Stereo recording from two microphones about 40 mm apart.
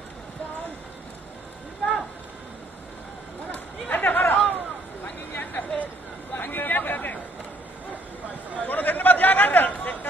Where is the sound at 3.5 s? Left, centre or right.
Left.